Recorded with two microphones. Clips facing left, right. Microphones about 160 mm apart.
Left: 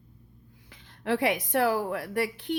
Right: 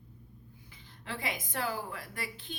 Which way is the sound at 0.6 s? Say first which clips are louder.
Left 14 dB; 70° left (ahead or behind).